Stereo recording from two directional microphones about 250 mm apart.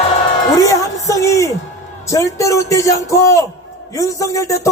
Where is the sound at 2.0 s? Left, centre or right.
Centre.